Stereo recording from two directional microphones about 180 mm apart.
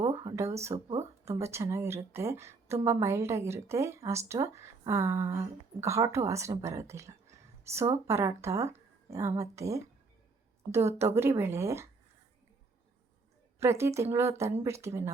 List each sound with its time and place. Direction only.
0.0 s speech: 20° right (ahead or behind)
0.7 s speech: 35° right (ahead or behind)
1.2 s speech: 15° right (ahead or behind)
13.6 s speech: 15° right (ahead or behind)